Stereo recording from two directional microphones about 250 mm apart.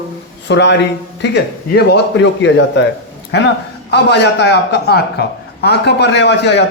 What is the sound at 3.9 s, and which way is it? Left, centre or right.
A man's voice, left.